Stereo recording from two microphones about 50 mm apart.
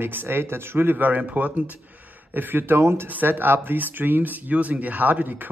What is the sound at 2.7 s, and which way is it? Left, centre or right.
Speech, right.